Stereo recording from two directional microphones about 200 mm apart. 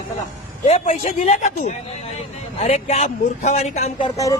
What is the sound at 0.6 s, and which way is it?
Speech, 30° left (ahead or behind).